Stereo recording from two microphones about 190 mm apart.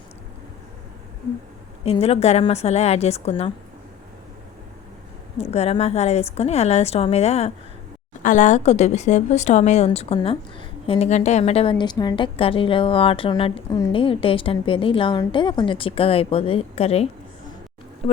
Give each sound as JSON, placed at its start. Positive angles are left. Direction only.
{"t": 1.8, "sound": "a woman's voice", "side_deg": 30}
{"t": 5.4, "sound": "a woman's voice", "side_deg": 35}